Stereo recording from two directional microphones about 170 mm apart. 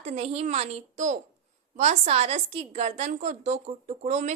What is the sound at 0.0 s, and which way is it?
A child's voice, 40° right (ahead or behind).